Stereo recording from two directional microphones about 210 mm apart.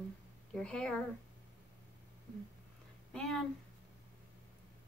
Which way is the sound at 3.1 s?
Centre (ahead or behind).